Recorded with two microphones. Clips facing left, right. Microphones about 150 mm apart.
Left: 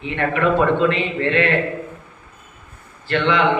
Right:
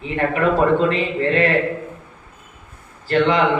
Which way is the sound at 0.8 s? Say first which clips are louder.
Even; 40° right (ahead or behind).